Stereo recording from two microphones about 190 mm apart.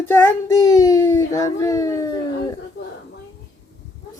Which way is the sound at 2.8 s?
65° left (ahead or behind).